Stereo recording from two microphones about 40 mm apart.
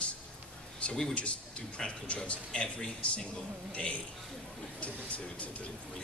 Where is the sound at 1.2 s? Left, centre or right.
Left.